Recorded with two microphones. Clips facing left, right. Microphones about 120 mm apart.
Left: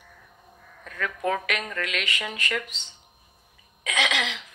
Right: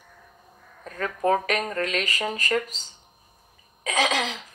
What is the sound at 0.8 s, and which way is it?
Speech, 35° right (ahead or behind).